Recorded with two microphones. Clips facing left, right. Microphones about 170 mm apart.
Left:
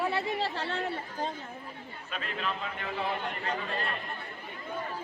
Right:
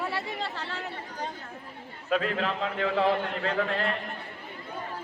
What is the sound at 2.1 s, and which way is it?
A man's voice, 90° right.